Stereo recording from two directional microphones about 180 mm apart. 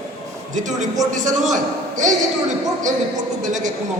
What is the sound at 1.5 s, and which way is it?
Speech, 45° right (ahead or behind).